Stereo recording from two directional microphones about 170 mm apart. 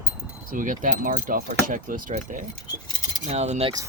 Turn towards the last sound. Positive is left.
turn(degrees=-40)  # may be behind; listen again after turning